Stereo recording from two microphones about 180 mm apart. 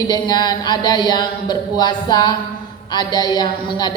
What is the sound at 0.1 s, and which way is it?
A woman's voice, 20° left (ahead or behind).